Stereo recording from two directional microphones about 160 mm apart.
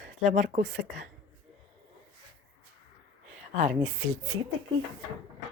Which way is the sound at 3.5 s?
45° right (ahead or behind).